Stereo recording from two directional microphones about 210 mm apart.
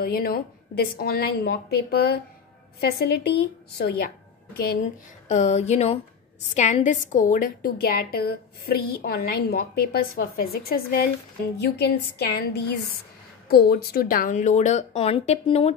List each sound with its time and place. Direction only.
0.0 s a woman's voice: 45° left (ahead or behind)
5.3 s a woman's voice: 35° left (ahead or behind)